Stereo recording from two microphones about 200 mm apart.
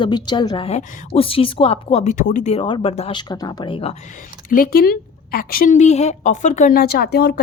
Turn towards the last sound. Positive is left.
turn(degrees=55)  # may be behind; listen again after turning